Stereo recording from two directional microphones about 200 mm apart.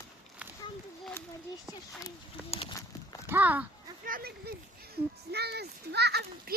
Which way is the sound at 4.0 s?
45° right (ahead or behind).